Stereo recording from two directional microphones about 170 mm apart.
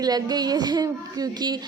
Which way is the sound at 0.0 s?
25° right (ahead or behind).